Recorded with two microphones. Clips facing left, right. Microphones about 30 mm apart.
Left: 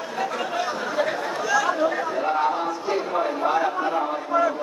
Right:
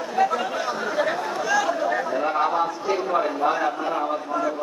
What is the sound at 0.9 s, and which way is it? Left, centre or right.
Chatter, centre.